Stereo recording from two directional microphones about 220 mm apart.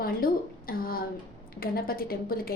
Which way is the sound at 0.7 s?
45° left (ahead or behind).